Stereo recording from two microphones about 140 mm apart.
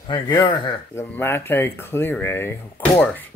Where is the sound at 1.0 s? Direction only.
15° left (ahead or behind).